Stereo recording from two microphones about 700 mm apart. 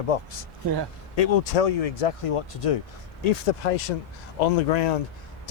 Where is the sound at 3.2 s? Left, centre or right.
Left.